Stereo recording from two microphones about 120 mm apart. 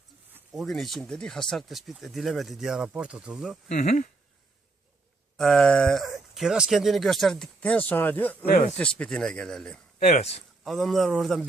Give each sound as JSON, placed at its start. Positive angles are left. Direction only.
{"t": 0.5, "sound": "speech", "side_deg": 0}
{"t": 3.7, "sound": "speech", "side_deg": 85}
{"t": 5.4, "sound": "speech", "side_deg": 5}
{"t": 10.1, "sound": "speech", "side_deg": 70}
{"t": 10.6, "sound": "speech", "side_deg": 0}